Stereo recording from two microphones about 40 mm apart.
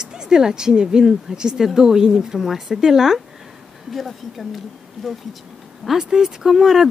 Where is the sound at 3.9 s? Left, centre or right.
Centre.